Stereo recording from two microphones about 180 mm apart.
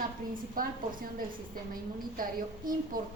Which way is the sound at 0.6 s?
50° right (ahead or behind).